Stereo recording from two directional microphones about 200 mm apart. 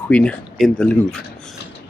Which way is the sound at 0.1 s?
5° left (ahead or behind).